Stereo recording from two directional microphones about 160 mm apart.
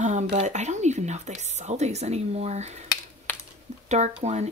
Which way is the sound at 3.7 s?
45° right (ahead or behind).